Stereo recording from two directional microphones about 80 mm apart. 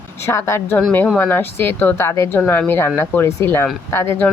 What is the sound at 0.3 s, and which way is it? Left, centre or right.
Speech, left.